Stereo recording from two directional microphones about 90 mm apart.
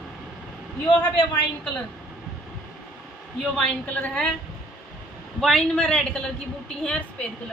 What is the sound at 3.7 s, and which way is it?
Speech, 20° left (ahead or behind).